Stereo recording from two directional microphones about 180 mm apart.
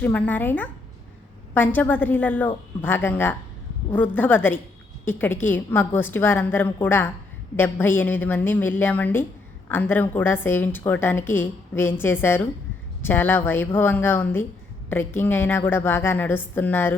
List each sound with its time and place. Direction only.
0.0 s a woman's voice: 10° left (ahead or behind)